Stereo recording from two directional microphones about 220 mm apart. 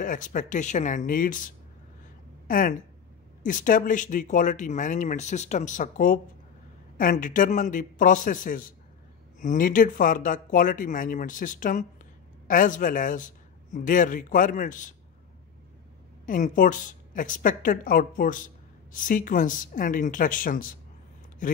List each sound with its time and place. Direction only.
0.0 s a woman's voice: 35° left (ahead or behind)
16.3 s a woman's voice: 35° left (ahead or behind)